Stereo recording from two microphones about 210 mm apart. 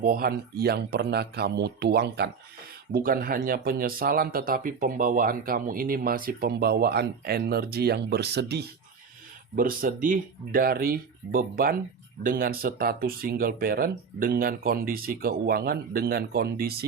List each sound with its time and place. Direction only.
0.0 s speech: 45° right (ahead or behind)